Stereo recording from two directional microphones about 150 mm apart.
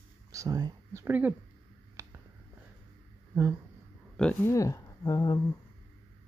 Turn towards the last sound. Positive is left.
turn(degrees=25)  # may be behind; listen again after turning